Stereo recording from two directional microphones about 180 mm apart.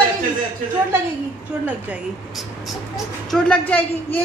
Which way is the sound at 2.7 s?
Centre (ahead or behind).